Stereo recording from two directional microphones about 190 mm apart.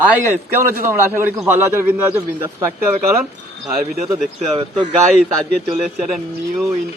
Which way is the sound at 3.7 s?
45° right (ahead or behind).